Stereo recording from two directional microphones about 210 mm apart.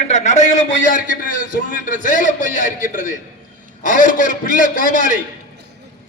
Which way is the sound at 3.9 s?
40° left (ahead or behind).